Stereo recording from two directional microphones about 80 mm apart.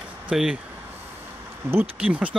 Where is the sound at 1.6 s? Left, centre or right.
Right.